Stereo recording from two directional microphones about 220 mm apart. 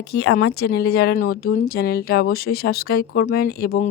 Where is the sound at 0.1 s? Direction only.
50° left (ahead or behind).